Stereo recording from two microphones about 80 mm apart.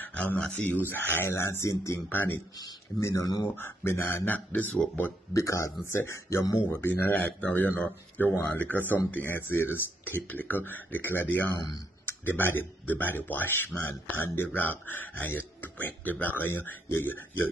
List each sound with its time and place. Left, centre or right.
0.0 s a sound: centre
0.4 s a man's voice: centre; by 2.0 s left
2.0 s a man's voice: left
3.0 s a man's voice: left
5.3 s a man's voice: left